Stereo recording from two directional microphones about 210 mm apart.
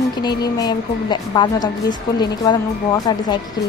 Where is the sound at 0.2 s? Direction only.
20° left (ahead or behind).